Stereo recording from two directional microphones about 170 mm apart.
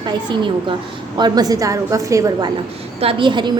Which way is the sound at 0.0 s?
25° right (ahead or behind).